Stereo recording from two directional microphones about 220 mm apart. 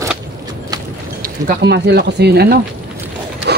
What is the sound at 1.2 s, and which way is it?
Speech, 45° right (ahead or behind).